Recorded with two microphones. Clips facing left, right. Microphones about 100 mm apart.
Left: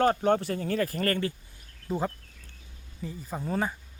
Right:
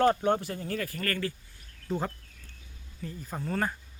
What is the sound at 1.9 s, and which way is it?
Speech, 5° left (ahead or behind).